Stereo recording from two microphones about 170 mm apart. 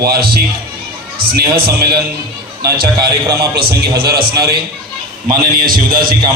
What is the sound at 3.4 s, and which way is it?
A man's voice, 65° right (ahead or behind).